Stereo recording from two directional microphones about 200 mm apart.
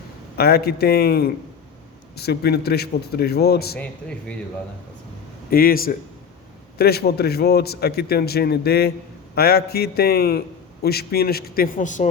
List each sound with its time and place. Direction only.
0.3 s a man's voice: 50° left (ahead or behind)
5.5 s a man's voice: 45° left (ahead or behind)